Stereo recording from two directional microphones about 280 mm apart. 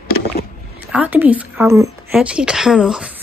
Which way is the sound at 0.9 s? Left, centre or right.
Centre.